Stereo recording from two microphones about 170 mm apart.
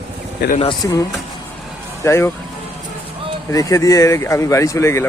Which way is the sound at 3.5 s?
20° left (ahead or behind).